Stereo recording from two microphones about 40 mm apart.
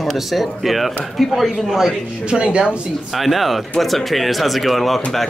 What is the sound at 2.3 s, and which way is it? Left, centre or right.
Speech, right.